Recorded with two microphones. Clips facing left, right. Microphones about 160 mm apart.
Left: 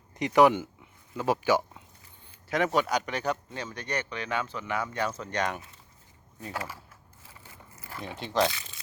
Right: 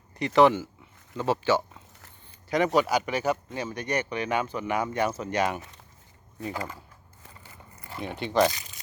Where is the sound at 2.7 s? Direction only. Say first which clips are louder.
Right 3 dB; 5° right (ahead or behind).